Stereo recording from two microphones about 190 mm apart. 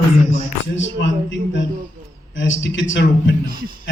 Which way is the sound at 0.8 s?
70° left (ahead or behind).